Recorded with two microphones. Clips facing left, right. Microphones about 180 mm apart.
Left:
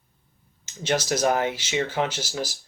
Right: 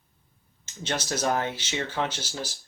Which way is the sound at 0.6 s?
10° left (ahead or behind).